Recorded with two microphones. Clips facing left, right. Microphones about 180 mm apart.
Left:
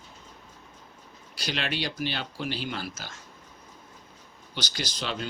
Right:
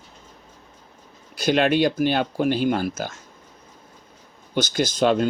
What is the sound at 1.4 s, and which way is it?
Speech, 50° right (ahead or behind).